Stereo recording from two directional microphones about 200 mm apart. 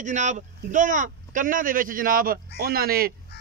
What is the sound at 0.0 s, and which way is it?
Speech, 40° right (ahead or behind).